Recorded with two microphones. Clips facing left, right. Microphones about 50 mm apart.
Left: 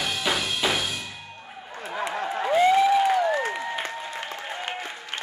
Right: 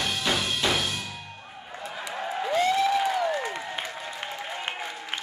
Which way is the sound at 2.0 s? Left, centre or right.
Left.